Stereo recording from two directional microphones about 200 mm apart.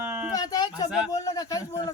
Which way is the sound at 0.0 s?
10° right (ahead or behind).